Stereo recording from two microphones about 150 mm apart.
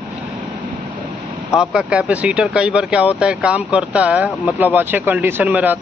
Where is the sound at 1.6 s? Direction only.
5° right (ahead or behind).